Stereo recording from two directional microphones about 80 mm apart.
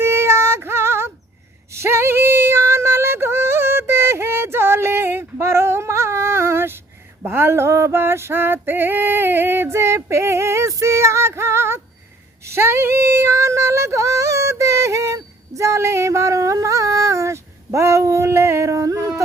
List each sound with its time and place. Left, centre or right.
0.0 s female singing: right